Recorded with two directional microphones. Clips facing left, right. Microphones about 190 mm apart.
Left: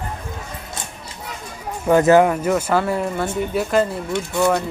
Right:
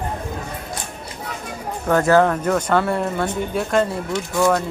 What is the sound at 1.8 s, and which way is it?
Speech, 15° left (ahead or behind).